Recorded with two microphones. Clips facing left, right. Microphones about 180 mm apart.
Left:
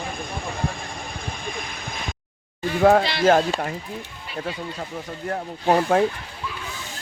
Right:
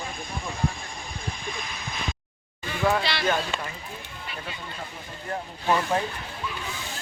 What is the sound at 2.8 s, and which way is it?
Speech, 50° left (ahead or behind).